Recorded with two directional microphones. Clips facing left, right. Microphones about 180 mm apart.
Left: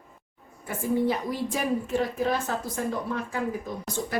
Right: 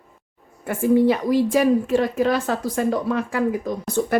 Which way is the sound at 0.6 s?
70° right (ahead or behind).